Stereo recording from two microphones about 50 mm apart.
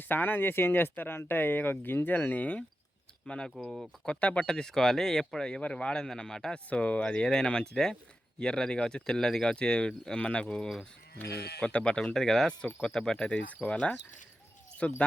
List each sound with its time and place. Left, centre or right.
0.0 s speech: left
3.2 s speech: centre
3.5 s speech: centre
4.0 s speech: left
4.4 s speech: centre
5.6 s speech: left
6.7 s speech: left